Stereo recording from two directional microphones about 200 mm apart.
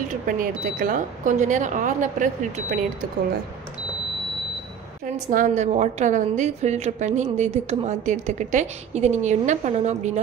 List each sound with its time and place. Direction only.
0.1 s a woman's voice: 45° right (ahead or behind)
5.3 s a woman's voice: 40° right (ahead or behind)